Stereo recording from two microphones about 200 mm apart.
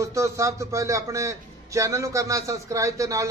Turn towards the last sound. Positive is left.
turn(degrees=-15)  # may be behind; listen again after turning